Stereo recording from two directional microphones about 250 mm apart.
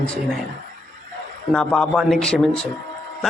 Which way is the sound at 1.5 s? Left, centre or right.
Centre.